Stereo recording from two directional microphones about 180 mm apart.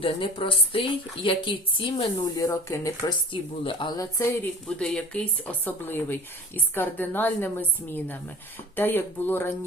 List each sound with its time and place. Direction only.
0.0 s a woman's voice: 30° left (ahead or behind)
4.6 s speech: 5° left (ahead or behind)
8.7 s speech: 10° left (ahead or behind)